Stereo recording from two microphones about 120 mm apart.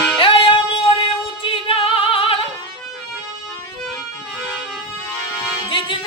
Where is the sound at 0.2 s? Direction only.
50° left (ahead or behind).